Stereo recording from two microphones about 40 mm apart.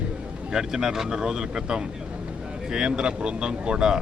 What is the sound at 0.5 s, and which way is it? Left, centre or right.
Speech, centre.